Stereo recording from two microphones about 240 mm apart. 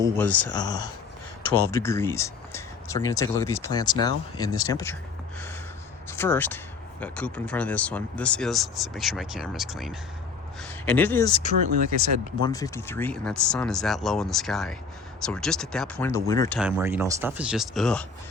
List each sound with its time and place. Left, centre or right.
0.0 s speech: centre
6.1 s speech: centre
11.3 s speech: left
16.6 s speech: centre